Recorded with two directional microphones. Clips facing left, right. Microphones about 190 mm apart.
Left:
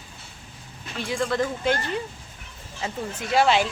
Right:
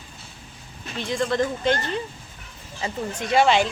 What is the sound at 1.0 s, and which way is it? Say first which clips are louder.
A woman's voice: right 2 dB; 5° left (ahead or behind).